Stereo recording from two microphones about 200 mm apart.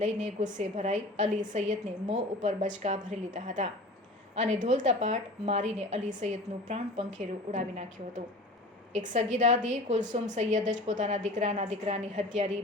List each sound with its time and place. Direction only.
0.3 s a woman's voice: 35° right (ahead or behind)